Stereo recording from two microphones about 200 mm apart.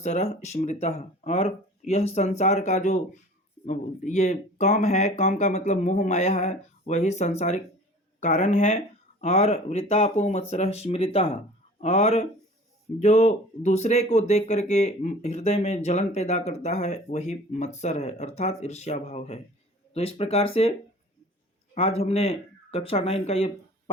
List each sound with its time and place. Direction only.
0.0 s speech: 35° left (ahead or behind)
21.8 s speech: 30° left (ahead or behind)